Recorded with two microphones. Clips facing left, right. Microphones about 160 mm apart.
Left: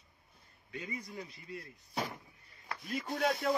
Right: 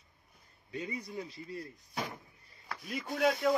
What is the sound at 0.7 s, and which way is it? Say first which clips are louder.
Speech: right 4 dB; 25° right (ahead or behind).